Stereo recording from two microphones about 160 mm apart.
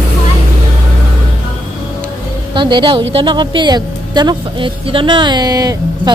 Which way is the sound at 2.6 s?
30° right (ahead or behind).